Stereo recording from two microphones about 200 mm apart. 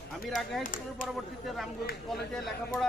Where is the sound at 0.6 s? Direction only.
40° left (ahead or behind).